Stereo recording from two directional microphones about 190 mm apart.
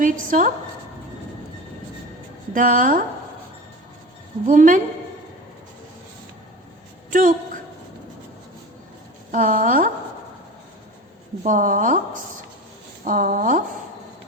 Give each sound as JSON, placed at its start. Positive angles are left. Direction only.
{"t": 0.0, "sound": "a woman's voice", "side_deg": -45}
{"t": 2.5, "sound": "a woman's voice", "side_deg": -45}
{"t": 4.4, "sound": "a woman's voice", "side_deg": -45}
{"t": 7.1, "sound": "a sound", "side_deg": -45}
{"t": 9.3, "sound": "a woman's voice", "side_deg": -45}
{"t": 11.4, "sound": "a woman's voice", "side_deg": -45}
{"t": 13.1, "sound": "a woman's voice", "side_deg": -45}